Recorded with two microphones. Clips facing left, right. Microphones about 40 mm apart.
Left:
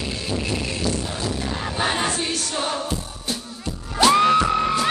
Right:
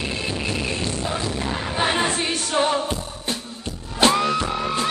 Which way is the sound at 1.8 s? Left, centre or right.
Right.